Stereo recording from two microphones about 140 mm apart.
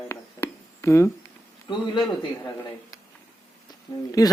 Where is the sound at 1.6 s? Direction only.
35° left (ahead or behind).